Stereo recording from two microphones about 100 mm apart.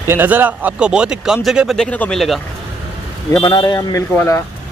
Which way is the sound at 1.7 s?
10° left (ahead or behind).